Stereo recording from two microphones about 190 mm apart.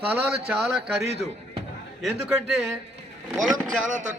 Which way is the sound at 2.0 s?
Centre (ahead or behind).